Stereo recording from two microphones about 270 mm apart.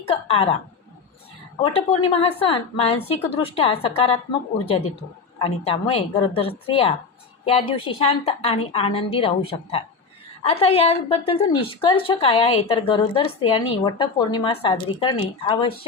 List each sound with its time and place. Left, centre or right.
0.1 s a woman's voice: left
1.6 s a woman's voice: centre
5.4 s a woman's voice: centre